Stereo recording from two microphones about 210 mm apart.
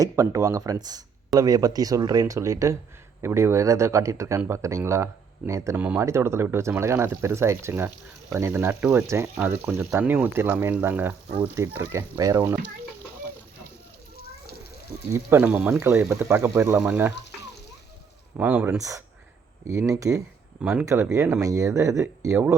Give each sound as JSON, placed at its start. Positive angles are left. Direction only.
{"t": 0.0, "sound": "speech", "side_deg": -15}
{"t": 15.1, "sound": "speech", "side_deg": -10}
{"t": 18.3, "sound": "speech", "side_deg": -10}